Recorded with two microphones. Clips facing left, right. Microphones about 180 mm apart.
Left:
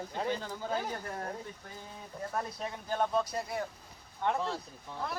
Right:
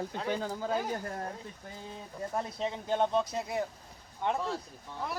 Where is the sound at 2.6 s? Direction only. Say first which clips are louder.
Right 5 dB; 25° right (ahead or behind).